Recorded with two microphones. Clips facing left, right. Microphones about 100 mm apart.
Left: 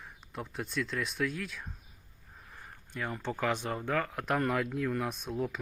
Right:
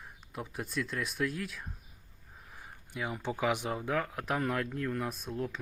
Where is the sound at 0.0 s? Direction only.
5° right (ahead or behind).